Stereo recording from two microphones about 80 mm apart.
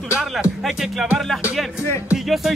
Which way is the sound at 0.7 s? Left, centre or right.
Centre.